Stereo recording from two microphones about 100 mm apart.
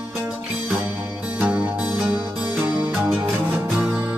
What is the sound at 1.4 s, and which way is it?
Music, 15° right (ahead or behind).